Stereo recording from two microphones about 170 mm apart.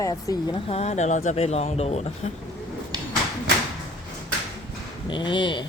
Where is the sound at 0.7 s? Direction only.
40° left (ahead or behind).